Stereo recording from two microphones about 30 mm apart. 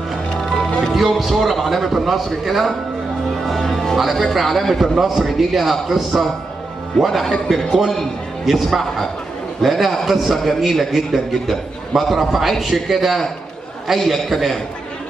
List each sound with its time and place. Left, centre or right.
0.4 s music: centre
0.9 s a man's voice: centre
3.4 s music: centre
3.9 s a man's voice: centre
7.0 s a man's voice: centre
7.4 s a man's voice: centre